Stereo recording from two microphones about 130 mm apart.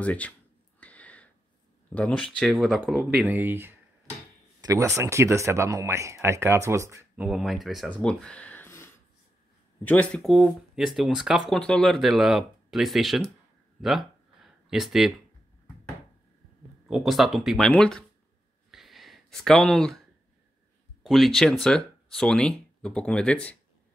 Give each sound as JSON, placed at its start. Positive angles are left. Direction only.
{"t": 0.0, "sound": "speech", "side_deg": 10}
{"t": 0.7, "sound": "a sound", "side_deg": 10}
{"t": 1.9, "sound": "speech", "side_deg": 10}
{"t": 3.3, "sound": "speech", "side_deg": -15}
{"t": 7.2, "sound": "speech", "side_deg": -5}
{"t": 7.9, "sound": "a sound", "side_deg": 5}
{"t": 9.8, "sound": "speech", "side_deg": 10}
{"t": 10.2, "sound": "speech", "side_deg": 0}
{"t": 13.7, "sound": "a sound", "side_deg": 0}
{"t": 16.8, "sound": "speech", "side_deg": 0}
{"t": 18.7, "sound": "a sound", "side_deg": 0}
{"t": 21.0, "sound": "speech", "side_deg": 0}